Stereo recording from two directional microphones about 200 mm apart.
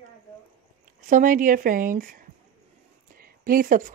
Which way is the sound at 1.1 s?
40° right (ahead or behind).